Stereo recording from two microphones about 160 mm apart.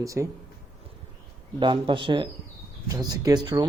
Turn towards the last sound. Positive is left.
turn(degrees=-25)  # may be behind; listen again after turning